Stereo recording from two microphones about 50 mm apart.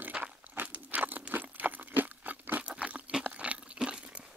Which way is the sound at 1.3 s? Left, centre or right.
Right.